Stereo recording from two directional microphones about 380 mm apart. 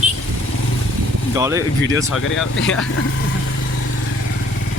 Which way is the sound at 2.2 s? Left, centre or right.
Left.